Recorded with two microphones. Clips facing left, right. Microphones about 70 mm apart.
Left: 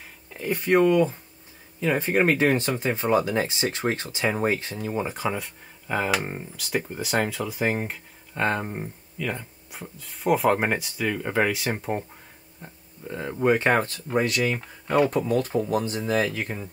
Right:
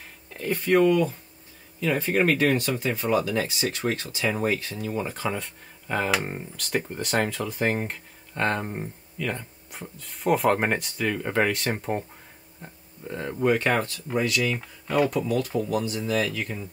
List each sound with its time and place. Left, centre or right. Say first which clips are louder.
0.5 s speech: even; centre
13.4 s speech: left 2 dB; left